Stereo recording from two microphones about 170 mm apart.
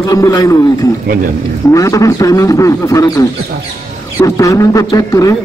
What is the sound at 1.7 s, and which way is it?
A man's voice, 20° left (ahead or behind).